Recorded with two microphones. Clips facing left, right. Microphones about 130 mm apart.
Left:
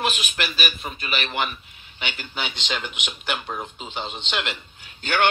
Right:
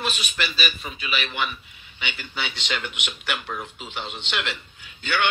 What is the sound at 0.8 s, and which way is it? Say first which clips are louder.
Speech: left 1 dB; 40° left (ahead or behind).